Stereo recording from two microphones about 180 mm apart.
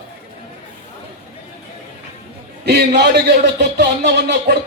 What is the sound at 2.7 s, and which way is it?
Speech, 70° right (ahead or behind).